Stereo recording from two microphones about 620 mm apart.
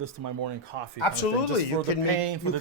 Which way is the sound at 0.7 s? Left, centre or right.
Right.